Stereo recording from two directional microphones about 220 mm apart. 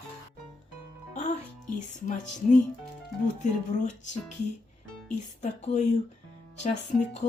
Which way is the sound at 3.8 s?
35° left (ahead or behind).